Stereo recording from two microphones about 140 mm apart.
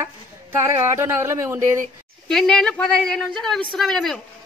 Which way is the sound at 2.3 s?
5° left (ahead or behind).